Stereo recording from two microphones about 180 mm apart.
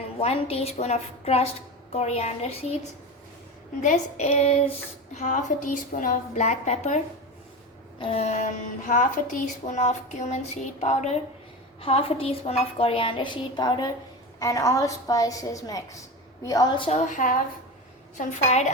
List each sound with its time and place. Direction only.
0.2 s speech: 35° left (ahead or behind)
3.8 s a woman's voice: 40° left (ahead or behind)
17.1 s a woman's voice: 45° left (ahead or behind)